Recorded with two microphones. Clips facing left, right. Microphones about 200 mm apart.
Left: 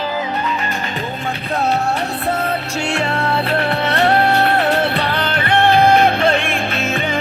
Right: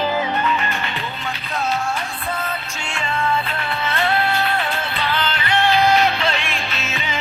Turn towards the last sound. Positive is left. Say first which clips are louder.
# left 8 dB
turn(degrees=55)  # may be behind; listen again after turning